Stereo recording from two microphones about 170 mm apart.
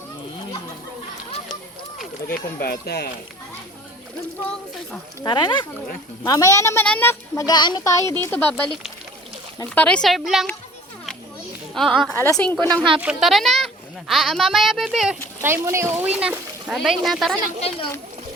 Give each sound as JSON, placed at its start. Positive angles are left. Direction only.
{"t": 2.2, "sound": "speech", "side_deg": 65}
{"t": 5.2, "sound": "a woman's voice", "side_deg": 25}
{"t": 11.7, "sound": "a child's voice", "side_deg": 0}
{"t": 12.1, "sound": "a woman's voice", "side_deg": 10}
{"t": 13.0, "sound": "a child's voice", "side_deg": -5}
{"t": 15.4, "sound": "a child's voice", "side_deg": -15}
{"t": 17.6, "sound": "a child's voice", "side_deg": 35}